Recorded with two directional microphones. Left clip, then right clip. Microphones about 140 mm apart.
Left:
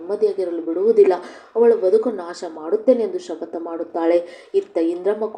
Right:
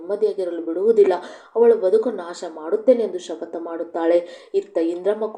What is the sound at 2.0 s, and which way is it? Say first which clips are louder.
Speech: left 1 dB; 25° left (ahead or behind).